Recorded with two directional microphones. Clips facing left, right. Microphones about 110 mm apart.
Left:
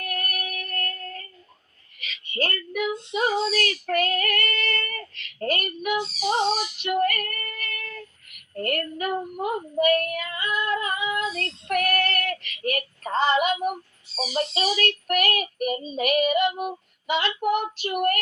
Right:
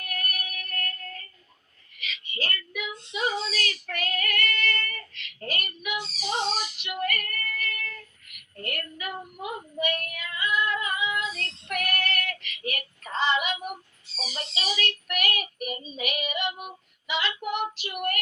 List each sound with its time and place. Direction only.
0.0 s music: 40° left (ahead or behind)
2.0 s a sound: 45° left (ahead or behind)
3.1 s female singing: 45° left (ahead or behind)
14.3 s child singing: 45° left (ahead or behind)